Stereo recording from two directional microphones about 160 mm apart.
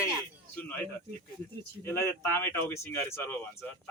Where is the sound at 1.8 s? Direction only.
15° left (ahead or behind).